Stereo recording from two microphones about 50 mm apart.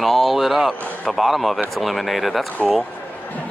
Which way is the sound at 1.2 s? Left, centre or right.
Centre.